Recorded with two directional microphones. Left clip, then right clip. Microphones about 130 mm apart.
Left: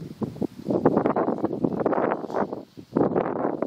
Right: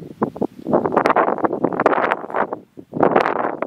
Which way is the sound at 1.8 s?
20° right (ahead or behind).